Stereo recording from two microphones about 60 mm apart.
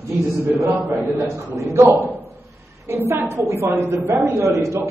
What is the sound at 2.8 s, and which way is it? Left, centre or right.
A woman's voice, right.